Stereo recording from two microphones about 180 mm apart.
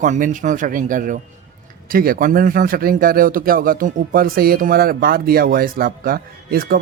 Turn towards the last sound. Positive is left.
turn(degrees=-55)  # may be behind; listen again after turning